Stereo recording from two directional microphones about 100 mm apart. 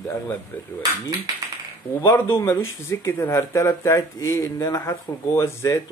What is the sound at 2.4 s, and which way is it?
Speech, 30° left (ahead or behind).